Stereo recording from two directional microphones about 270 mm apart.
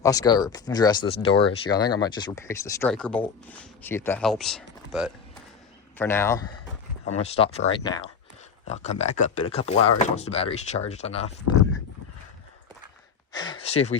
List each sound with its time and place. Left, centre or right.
0.0 s speech: centre
6.0 s speech: centre
7.1 s speech: left
13.3 s a sound: centre